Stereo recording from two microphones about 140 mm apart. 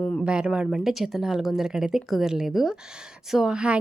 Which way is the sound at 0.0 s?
5° left (ahead or behind).